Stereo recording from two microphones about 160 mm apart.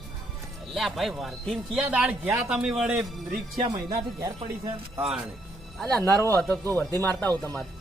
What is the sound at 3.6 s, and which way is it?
Speech, 30° right (ahead or behind).